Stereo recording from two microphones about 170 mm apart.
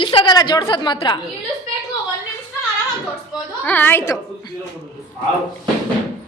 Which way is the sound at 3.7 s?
10° left (ahead or behind).